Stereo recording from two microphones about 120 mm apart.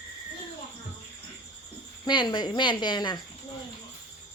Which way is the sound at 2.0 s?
40° left (ahead or behind).